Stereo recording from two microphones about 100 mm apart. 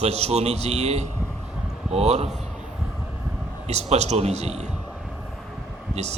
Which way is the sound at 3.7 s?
90° right.